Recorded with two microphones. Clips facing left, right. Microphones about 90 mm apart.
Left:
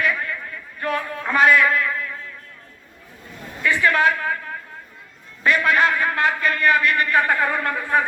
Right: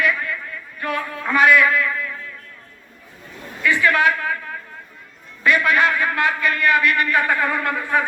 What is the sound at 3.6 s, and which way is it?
Speech, 35° left (ahead or behind).